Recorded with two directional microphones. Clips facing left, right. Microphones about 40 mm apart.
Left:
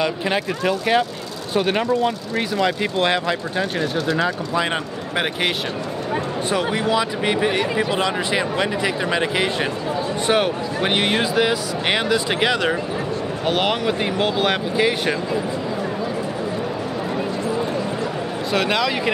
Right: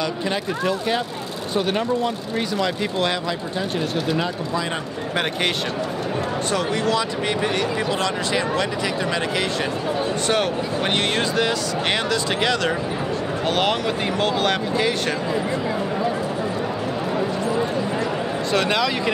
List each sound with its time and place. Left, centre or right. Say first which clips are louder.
0.0 s speech: left 3 dB; left
5.1 s speech: left 1 dB; centre
6.5 s speech: left 2 dB; centre
18.5 s a man's voice: left 1 dB; centre